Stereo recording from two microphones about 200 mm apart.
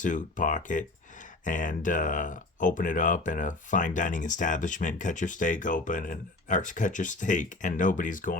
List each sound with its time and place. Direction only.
0.0 s speech: 40° left (ahead or behind)